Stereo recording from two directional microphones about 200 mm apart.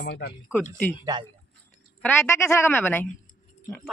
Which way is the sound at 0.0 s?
55° left (ahead or behind).